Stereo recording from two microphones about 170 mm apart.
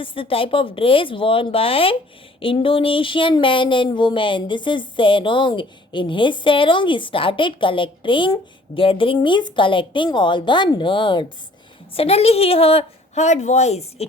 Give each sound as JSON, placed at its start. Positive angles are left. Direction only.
{"t": 0.0, "sound": "speech", "side_deg": 30}